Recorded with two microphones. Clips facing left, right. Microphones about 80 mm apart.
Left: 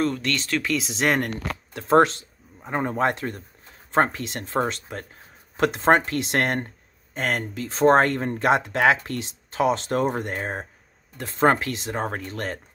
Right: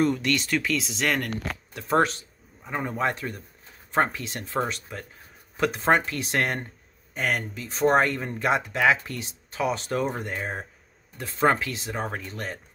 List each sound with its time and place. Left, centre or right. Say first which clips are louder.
0.0 s speech: right 1 dB; centre
0.9 s speech: left 4 dB; left
4.1 s speech: left 3 dB; left
4.6 s speech: left 3 dB; left
6.1 s speech: left 3 dB; left
8.0 s speech: left 3 dB; left
10.4 s speech: left 2 dB; left